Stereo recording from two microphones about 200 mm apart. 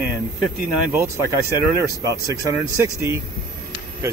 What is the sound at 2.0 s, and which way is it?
Speech, 15° right (ahead or behind).